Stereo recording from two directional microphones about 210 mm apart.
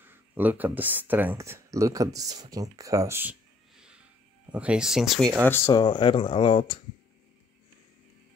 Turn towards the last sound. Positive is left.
turn(degrees=25)  # may be behind; listen again after turning